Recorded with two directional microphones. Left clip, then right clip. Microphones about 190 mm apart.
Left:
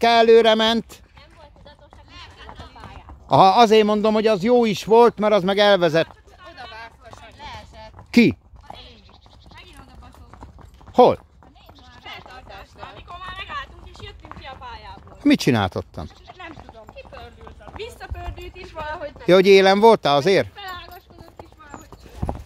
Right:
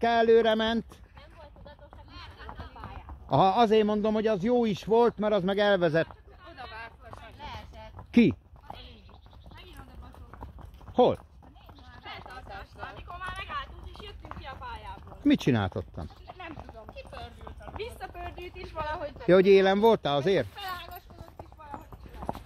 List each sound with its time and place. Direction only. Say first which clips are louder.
0.0 s a man's voice: left 9 dB; 30° left (ahead or behind)
2.4 s a sound: left 1 dB; 10° left (ahead or behind)
3.3 s a man's voice: left 10 dB; 30° left (ahead or behind)
7.3 s a sound: left 6 dB; 45° left (ahead or behind)
8.1 s speech: left 7 dB; 30° left (ahead or behind)
10.9 s a sound: left 9 dB; 35° left (ahead or behind)
12.1 s clip-clop: left 4 dB; 30° left (ahead or behind)
15.2 s speech: left 8 dB; 30° left (ahead or behind)
16.9 s clip-clop: left 3 dB; 65° right (ahead or behind)
17.7 s speech: left 4 dB; 5° left (ahead or behind)
19.2 s a man's voice: left 7 dB; 20° left (ahead or behind)
20.5 s music: left 3 dB; 60° right (ahead or behind)
22.2 s clip-clop: left 5 dB; 25° right (ahead or behind)